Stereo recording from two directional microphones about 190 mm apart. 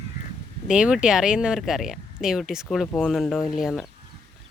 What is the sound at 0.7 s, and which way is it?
Speech, 5° right (ahead or behind).